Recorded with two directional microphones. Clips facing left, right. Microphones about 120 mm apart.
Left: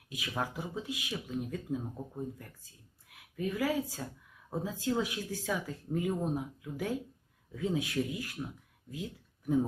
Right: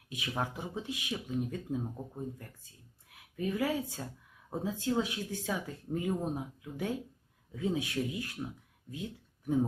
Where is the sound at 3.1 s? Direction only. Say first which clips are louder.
Left 1 dB; 30° right (ahead or behind).